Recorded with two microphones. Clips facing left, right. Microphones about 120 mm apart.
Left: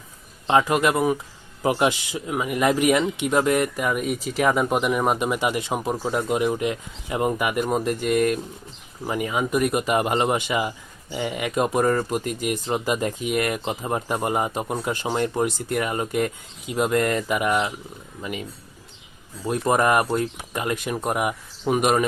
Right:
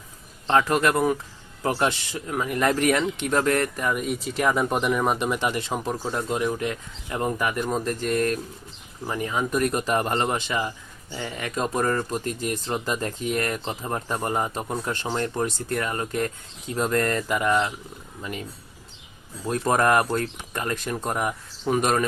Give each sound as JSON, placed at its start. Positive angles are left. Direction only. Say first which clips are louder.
{"t": 0.4, "sound": "speech", "louder": "left 1 dB", "side_deg": 10}
{"t": 19.5, "sound": "speech", "louder": "left 1 dB", "side_deg": 5}